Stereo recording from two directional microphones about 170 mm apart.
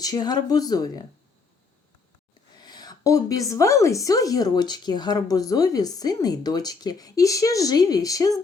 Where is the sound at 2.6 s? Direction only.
25° left (ahead or behind).